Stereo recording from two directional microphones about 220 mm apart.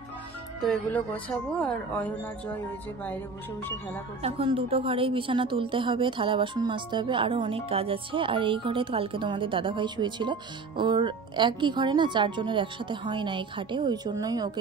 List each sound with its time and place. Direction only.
0.6 s speech: 5° left (ahead or behind)
4.2 s a woman's voice: 25° right (ahead or behind)